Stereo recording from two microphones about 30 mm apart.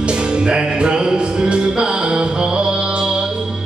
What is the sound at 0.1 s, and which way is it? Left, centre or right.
Music, right.